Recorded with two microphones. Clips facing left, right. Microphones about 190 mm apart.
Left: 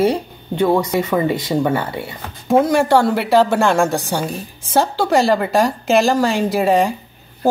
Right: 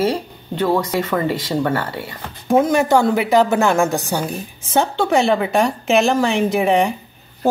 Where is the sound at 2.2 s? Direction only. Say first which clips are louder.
Left 1 dB; 5° left (ahead or behind).